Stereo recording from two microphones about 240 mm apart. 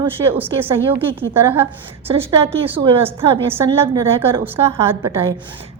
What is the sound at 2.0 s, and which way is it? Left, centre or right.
Speech, right.